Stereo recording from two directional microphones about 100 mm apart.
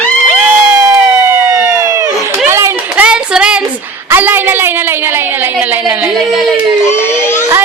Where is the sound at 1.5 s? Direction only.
30° right (ahead or behind).